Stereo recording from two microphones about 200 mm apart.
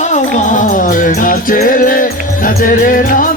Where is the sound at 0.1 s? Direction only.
40° left (ahead or behind).